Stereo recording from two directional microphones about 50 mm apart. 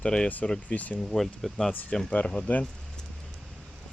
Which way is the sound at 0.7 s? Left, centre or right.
Left.